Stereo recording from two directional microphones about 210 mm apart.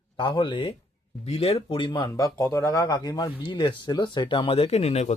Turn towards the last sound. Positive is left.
turn(degrees=30)  # may be behind; listen again after turning